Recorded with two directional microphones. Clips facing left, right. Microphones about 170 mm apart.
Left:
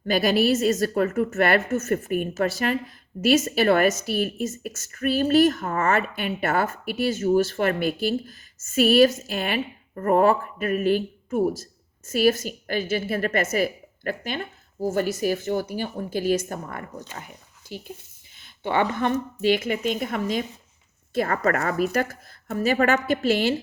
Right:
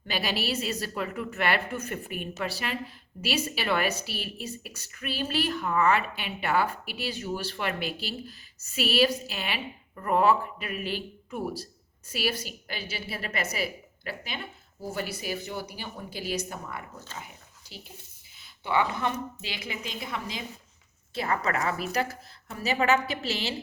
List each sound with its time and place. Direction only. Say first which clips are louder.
0.0 s speech: left 10 dB; 45° left (ahead or behind)
18.6 s speech: left 4 dB; 55° left (ahead or behind)